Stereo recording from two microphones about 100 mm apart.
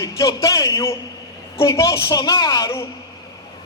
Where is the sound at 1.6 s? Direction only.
30° left (ahead or behind).